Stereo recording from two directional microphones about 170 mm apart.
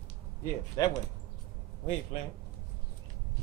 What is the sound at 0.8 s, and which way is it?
Speech, 20° left (ahead or behind).